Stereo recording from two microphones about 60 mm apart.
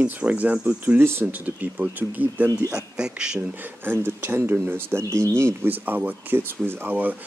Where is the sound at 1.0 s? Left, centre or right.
Right.